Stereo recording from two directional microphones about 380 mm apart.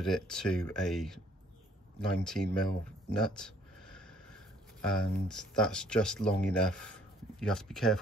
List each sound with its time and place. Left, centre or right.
0.0 s speech: centre
2.0 s a sound: centre
4.8 s speech: centre